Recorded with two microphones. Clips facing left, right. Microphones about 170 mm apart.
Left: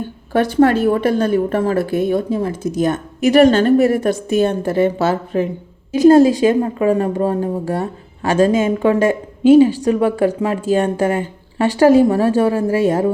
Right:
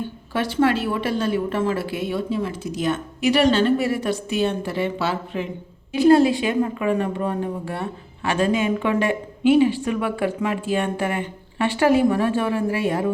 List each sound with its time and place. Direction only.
0.5 s a woman's voice: 45° left (ahead or behind)